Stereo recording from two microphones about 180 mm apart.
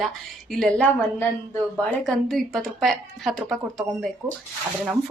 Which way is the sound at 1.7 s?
Centre (ahead or behind).